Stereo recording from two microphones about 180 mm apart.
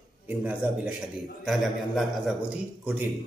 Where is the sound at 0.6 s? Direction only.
10° right (ahead or behind).